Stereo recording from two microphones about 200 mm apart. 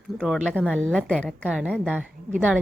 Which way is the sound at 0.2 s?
Centre (ahead or behind).